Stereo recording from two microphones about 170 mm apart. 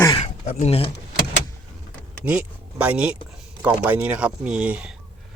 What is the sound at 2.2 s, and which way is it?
Speech, 5° right (ahead or behind).